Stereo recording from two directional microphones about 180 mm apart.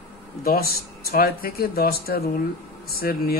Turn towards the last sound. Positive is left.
turn(degrees=55)  # may be behind; listen again after turning